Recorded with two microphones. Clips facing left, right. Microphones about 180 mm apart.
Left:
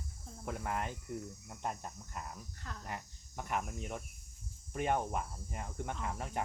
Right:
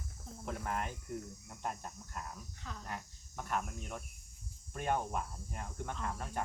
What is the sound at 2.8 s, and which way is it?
Cricket, 15° left (ahead or behind).